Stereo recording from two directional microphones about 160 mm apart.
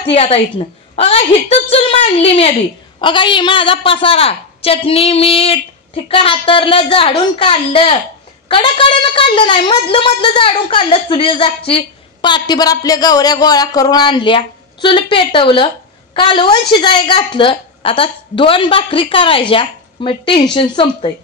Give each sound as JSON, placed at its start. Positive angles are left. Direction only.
{"t": 0.0, "sound": "a woman's voice", "side_deg": 40}